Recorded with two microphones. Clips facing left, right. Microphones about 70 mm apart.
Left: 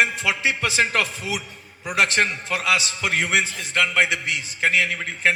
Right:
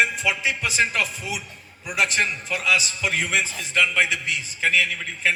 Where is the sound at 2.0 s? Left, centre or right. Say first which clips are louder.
Left 2 dB; left.